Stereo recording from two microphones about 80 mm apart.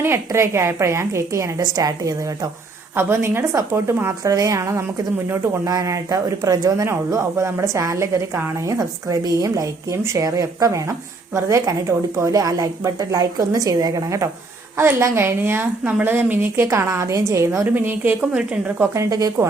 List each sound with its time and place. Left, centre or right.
0.0 s speech: right
2.9 s speech: right
4.2 s a woman's voice: right
8.7 s a woman's voice: right
14.8 s a woman's voice: right
16.6 s speech: right
17.7 s a woman's voice: right
18.3 s a woman's voice: centre
18.8 s speech: right